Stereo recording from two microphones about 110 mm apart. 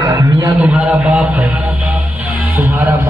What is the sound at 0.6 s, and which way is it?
Speech, 10° right (ahead or behind).